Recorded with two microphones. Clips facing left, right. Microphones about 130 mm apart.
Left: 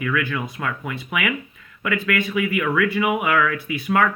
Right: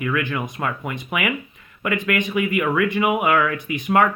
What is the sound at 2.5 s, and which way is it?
Speech, 35° right (ahead or behind).